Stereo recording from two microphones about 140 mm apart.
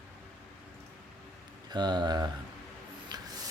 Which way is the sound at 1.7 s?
30° right (ahead or behind).